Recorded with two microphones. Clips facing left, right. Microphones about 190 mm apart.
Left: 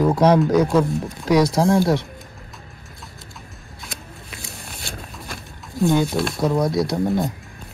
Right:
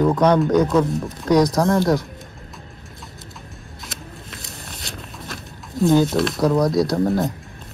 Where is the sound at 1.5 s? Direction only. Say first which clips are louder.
Left 1 dB; 30° left (ahead or behind).